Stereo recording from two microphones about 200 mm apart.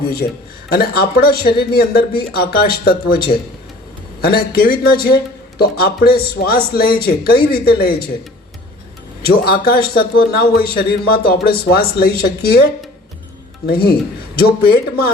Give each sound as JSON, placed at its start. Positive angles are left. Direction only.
{"t": 0.0, "sound": "a sound", "side_deg": 50}
{"t": 0.7, "sound": "a man's voice", "side_deg": 50}
{"t": 4.2, "sound": "a man's voice", "side_deg": 50}
{"t": 9.2, "sound": "a man's voice", "side_deg": 50}
{"t": 14.3, "sound": "a man's voice", "side_deg": 50}